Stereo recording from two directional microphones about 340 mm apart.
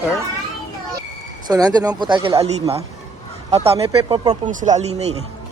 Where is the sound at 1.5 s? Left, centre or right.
Centre.